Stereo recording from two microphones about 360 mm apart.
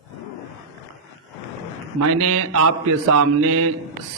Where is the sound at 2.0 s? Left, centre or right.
Right.